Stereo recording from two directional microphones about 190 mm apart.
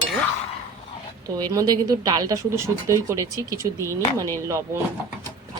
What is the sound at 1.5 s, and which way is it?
Speech, 20° right (ahead or behind).